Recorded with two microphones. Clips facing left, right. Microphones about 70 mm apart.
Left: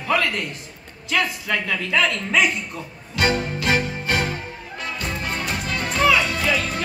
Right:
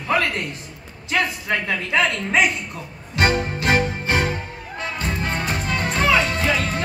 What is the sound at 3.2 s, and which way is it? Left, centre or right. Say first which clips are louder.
Music: right 1 dB; right.